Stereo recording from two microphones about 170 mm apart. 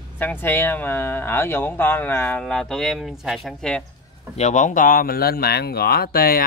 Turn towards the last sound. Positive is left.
turn(degrees=60)  # may be behind; listen again after turning